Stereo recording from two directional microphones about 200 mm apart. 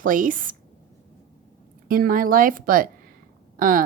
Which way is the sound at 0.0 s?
40° right (ahead or behind).